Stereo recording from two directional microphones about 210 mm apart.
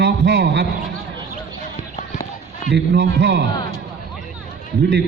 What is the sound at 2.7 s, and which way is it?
Speech, 55° right (ahead or behind).